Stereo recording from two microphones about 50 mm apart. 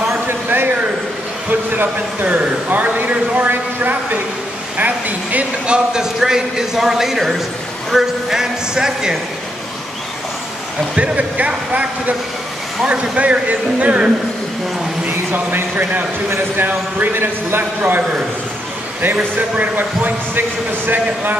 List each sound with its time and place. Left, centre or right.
0.3 s a sound: right
1.5 s speech: right
5.9 s a man's voice: centre
11.0 s speech: right
15.0 s a man's voice: right
19.1 s speech: right